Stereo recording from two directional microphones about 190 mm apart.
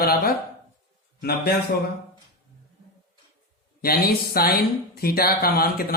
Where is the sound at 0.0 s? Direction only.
50° left (ahead or behind).